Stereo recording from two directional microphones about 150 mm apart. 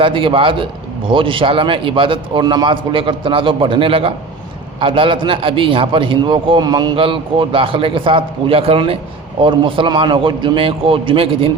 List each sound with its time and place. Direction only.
0.0 s a man's voice: 35° right (ahead or behind)